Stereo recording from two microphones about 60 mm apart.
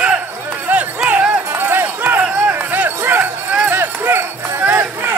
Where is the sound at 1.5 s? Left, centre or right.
Right.